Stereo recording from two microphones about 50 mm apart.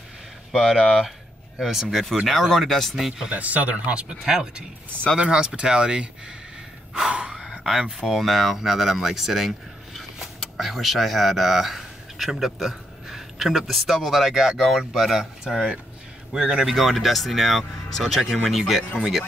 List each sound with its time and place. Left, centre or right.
0.5 s speech: centre
3.3 s speech: right
7.1 s speech: right
8.1 s a man's voice: centre